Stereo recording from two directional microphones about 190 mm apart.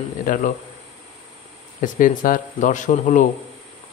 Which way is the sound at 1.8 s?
45° left (ahead or behind).